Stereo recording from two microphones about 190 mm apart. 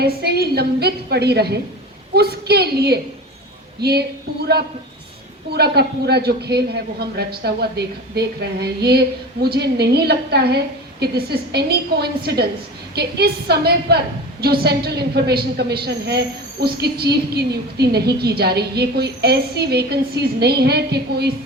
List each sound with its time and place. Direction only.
0.0 s a woman's voice: 55° right (ahead or behind)
5.5 s a woman's voice: 60° right (ahead or behind)